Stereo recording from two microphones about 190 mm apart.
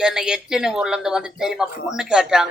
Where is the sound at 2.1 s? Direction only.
5° right (ahead or behind).